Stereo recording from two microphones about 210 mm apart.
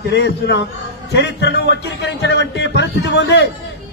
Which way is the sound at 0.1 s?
55° left (ahead or behind).